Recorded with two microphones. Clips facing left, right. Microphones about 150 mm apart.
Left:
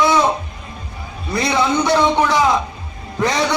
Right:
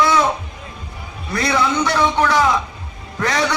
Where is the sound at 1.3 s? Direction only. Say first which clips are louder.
Left 1 dB; 20° left (ahead or behind).